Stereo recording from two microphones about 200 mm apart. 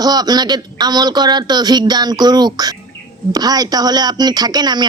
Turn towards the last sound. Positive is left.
turn(degrees=-20)  # may be behind; listen again after turning